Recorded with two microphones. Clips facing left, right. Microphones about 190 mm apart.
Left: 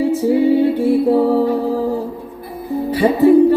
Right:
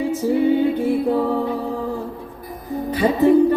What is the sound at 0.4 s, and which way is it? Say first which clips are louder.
Music: left 4 dB; 35° left (ahead or behind).